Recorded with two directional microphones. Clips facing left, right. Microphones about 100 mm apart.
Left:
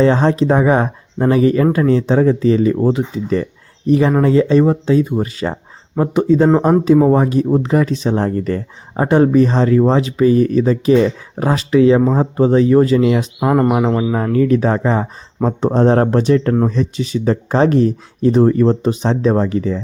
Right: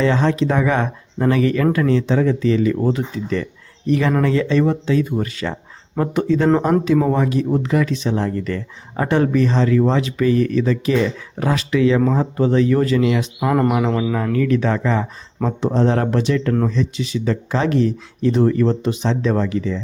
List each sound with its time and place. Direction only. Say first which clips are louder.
0.0 s speech: left 4 dB; 35° left (ahead or behind)
3.8 s speech: left 4 dB; 30° left (ahead or behind)